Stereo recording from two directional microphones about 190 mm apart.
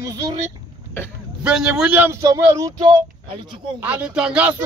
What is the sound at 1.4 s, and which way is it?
Speech, 5° right (ahead or behind).